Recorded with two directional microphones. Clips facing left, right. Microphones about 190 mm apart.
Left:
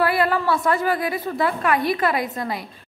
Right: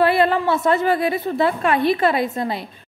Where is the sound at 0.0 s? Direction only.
25° right (ahead or behind).